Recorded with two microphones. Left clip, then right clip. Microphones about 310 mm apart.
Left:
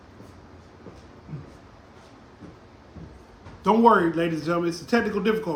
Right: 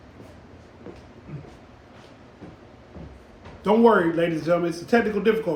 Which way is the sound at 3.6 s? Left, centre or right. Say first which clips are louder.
Even; centre.